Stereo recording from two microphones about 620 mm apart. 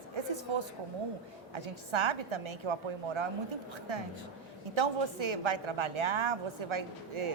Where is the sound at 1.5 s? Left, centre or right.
Right.